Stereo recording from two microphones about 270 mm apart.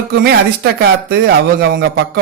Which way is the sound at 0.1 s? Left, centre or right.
Right.